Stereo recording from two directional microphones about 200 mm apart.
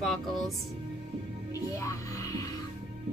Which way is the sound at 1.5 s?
15° left (ahead or behind).